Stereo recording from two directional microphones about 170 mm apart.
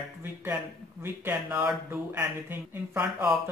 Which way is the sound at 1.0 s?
15° right (ahead or behind).